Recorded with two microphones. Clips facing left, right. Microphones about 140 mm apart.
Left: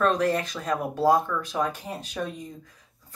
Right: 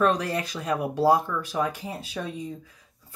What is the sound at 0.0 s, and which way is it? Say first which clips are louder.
Speech: left 1 dB; 10° right (ahead or behind).